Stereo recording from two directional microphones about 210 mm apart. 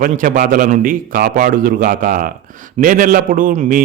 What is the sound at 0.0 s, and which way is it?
A man's voice, 40° right (ahead or behind).